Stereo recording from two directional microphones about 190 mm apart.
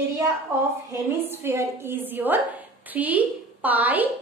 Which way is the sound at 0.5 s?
10° right (ahead or behind).